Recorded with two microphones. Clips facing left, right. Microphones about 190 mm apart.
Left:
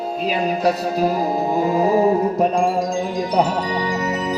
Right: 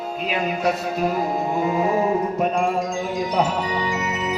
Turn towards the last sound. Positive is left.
turn(degrees=35)  # may be behind; listen again after turning